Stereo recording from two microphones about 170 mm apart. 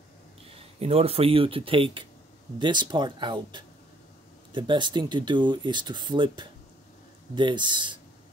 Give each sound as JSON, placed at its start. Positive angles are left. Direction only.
{"t": 0.6, "sound": "speech", "side_deg": -35}